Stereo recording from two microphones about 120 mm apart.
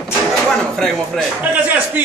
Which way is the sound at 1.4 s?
15° right (ahead or behind).